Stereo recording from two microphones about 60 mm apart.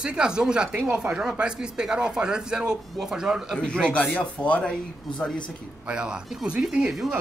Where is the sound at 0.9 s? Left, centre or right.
Right.